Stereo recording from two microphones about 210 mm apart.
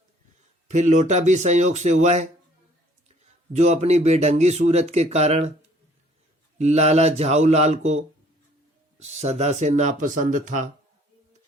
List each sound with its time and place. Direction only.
0.7 s speech: 35° right (ahead or behind)
3.5 s speech: 35° right (ahead or behind)
6.6 s speech: 30° right (ahead or behind)